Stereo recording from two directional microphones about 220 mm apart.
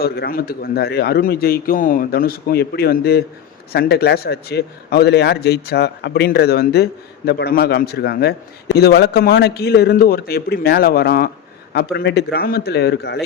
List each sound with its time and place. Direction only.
0.0 s a man's voice: 45° left (ahead or behind)